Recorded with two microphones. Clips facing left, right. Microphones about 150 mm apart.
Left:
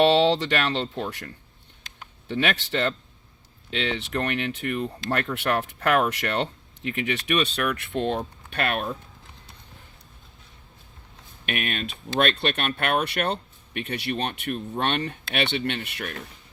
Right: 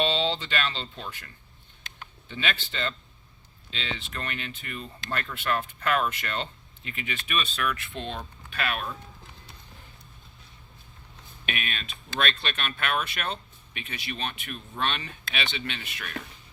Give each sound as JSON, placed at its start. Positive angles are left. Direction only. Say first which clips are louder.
{"t": 0.0, "sound": "speech", "louder": "left 8 dB", "side_deg": 75}
{"t": 11.4, "sound": "speech", "louder": "left 6 dB", "side_deg": 50}